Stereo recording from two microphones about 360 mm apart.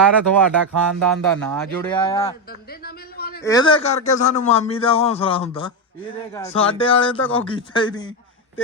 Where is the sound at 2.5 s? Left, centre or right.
Left.